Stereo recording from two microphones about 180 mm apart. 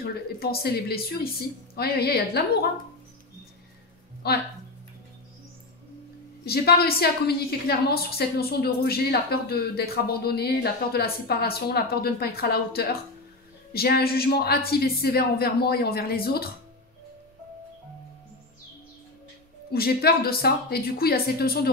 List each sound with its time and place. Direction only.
0.0 s a woman's voice: 60° left (ahead or behind)
4.2 s a woman's voice: 60° left (ahead or behind)
6.4 s a woman's voice: 60° left (ahead or behind)
19.7 s a woman's voice: 60° left (ahead or behind)